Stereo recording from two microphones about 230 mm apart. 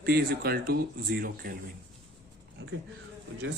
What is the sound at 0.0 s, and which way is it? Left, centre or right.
Speech, right.